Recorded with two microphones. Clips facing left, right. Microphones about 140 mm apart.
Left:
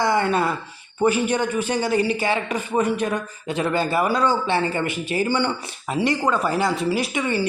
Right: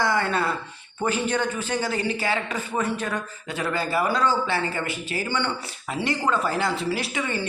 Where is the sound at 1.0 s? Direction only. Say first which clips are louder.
Left 5 dB; 10° left (ahead or behind).